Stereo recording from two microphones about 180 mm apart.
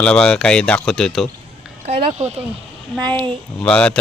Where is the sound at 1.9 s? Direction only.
35° right (ahead or behind).